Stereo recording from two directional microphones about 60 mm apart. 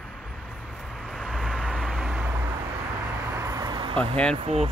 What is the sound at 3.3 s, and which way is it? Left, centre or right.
Vehicle, right.